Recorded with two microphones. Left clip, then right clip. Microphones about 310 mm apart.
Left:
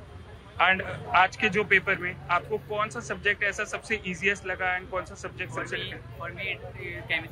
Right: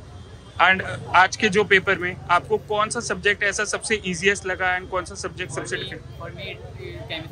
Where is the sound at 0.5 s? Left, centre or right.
Centre.